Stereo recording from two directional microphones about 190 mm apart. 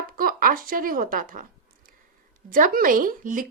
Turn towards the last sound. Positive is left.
turn(degrees=-45)  # may be behind; listen again after turning